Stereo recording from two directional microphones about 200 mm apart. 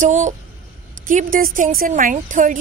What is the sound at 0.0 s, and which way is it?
A woman's voice, 40° right (ahead or behind).